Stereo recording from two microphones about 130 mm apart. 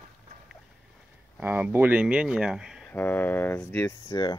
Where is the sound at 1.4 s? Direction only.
15° right (ahead or behind).